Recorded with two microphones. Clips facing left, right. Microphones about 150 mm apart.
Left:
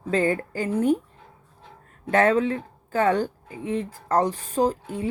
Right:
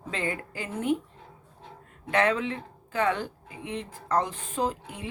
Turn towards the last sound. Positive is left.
turn(degrees=40)  # may be behind; listen again after turning